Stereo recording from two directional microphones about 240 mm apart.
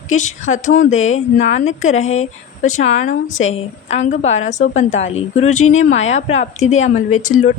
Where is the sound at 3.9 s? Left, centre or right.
Left.